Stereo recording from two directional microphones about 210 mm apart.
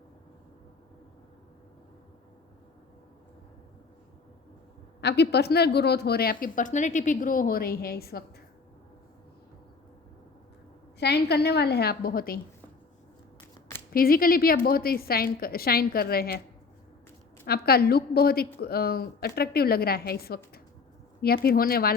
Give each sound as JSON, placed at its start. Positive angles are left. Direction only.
{"t": 4.9, "sound": "speech", "side_deg": 55}
{"t": 11.0, "sound": "speech", "side_deg": 50}
{"t": 13.9, "sound": "speech", "side_deg": 45}
{"t": 17.4, "sound": "speech", "side_deg": 50}